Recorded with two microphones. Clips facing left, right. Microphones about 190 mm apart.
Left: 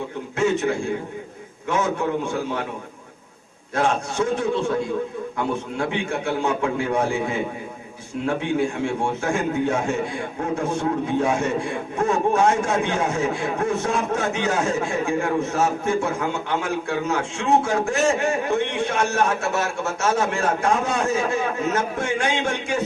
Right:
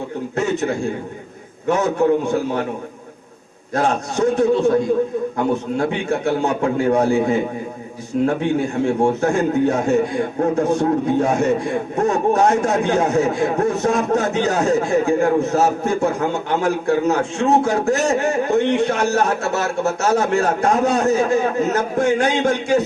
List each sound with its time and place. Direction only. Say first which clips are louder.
0.3 s a man's voice: even; 40° right (ahead or behind)
3.8 s a man's voice: right 3 dB; 40° right (ahead or behind)